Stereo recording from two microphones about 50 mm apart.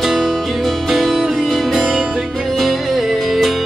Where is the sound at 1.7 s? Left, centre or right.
Centre.